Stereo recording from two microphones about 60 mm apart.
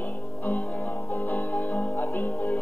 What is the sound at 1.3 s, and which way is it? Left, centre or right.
Music, left.